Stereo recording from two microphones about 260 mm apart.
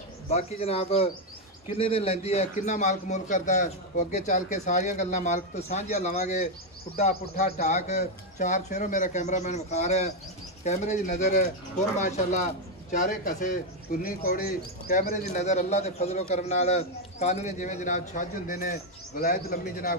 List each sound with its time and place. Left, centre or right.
0.3 s speech: left